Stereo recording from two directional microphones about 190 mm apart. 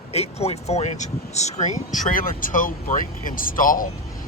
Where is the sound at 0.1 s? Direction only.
35° left (ahead or behind).